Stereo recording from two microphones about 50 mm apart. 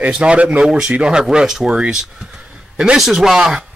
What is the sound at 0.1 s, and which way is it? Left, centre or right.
Speech, right.